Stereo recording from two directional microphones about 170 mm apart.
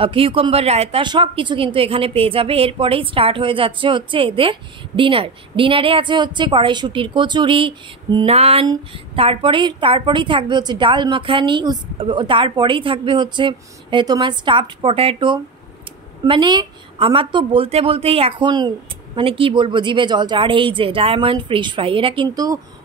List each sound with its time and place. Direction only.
0.0 s a woman's voice: 30° right (ahead or behind)